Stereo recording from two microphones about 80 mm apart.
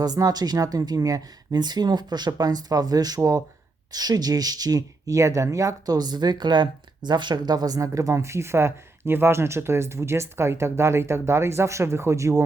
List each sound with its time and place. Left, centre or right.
0.0 s speech: right